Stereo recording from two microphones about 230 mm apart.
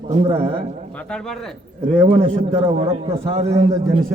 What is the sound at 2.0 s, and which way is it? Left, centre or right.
A man's voice, right.